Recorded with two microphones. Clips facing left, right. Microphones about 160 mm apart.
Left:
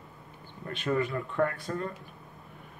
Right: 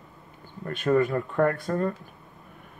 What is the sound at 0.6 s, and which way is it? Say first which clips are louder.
Speech: right 7 dB; 50° right (ahead or behind).